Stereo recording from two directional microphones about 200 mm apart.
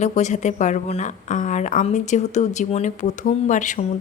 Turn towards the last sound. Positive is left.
turn(degrees=40)  # may be behind; listen again after turning